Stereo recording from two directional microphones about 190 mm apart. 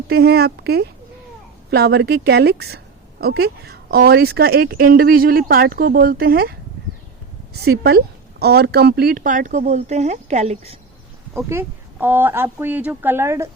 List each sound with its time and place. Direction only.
0.1 s speech: 55° right (ahead or behind)
7.5 s speech: 55° right (ahead or behind); by 10.8 s 35° right (ahead or behind)
11.3 s a woman's voice: 10° right (ahead or behind)